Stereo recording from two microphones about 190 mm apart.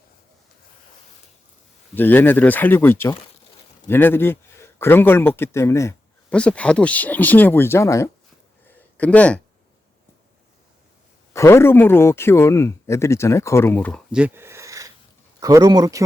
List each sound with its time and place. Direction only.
2.0 s speech: 10° left (ahead or behind)
11.3 s speech: 15° left (ahead or behind)
14.1 s a sound: 5° right (ahead or behind)
15.4 s speech: 20° right (ahead or behind)